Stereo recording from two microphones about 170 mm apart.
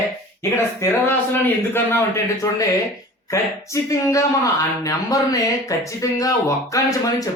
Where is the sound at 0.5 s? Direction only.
15° left (ahead or behind).